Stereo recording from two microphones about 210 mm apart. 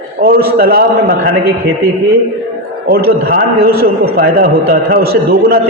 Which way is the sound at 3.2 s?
45° right (ahead or behind).